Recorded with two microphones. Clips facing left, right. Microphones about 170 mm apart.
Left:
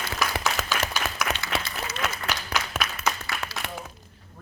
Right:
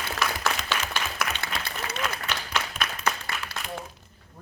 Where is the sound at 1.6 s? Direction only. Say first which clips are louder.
Even; 60° right (ahead or behind).